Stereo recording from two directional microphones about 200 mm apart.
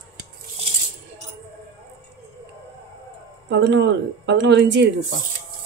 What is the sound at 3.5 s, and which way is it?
Speech, 60° right (ahead or behind).